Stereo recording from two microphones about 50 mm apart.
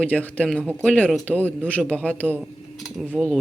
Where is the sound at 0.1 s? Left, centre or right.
Left.